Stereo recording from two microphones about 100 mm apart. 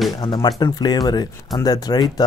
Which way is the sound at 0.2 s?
45° left (ahead or behind).